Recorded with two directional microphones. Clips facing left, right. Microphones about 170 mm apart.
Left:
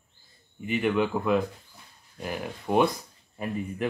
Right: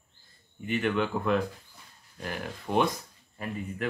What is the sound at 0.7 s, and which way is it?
Speech, 10° left (ahead or behind).